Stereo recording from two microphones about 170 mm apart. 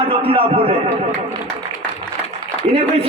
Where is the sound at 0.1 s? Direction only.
35° right (ahead or behind).